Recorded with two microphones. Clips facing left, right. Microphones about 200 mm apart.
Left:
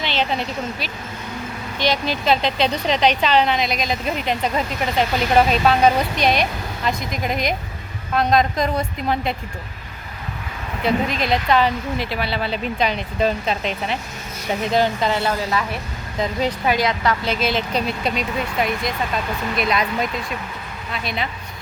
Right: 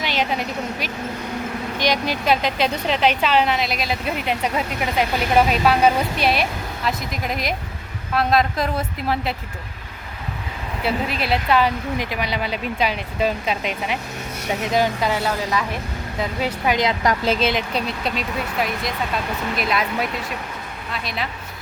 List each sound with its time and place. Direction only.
0.0 s a woman's voice: 10° right (ahead or behind)
10.8 s speech: 5° right (ahead or behind)
16.7 s a woman's voice: 20° right (ahead or behind)
17.7 s speech: centre (ahead or behind)